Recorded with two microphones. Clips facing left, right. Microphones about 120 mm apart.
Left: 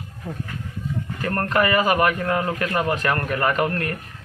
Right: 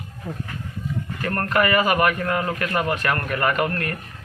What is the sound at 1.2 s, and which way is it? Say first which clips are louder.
A man's voice: even; 20° left (ahead or behind).